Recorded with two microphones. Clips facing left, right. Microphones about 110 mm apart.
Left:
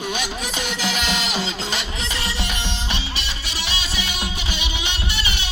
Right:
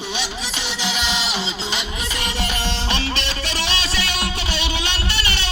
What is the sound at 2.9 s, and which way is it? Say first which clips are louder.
Music: right 5 dB; 10° left (ahead or behind).